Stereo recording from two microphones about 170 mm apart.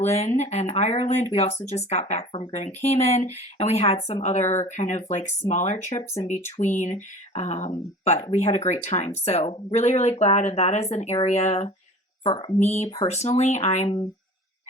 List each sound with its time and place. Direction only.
0.0 s speech: 40° left (ahead or behind)